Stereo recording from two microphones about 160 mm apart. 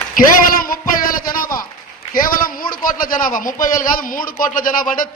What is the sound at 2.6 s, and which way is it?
Speech, 60° left (ahead or behind).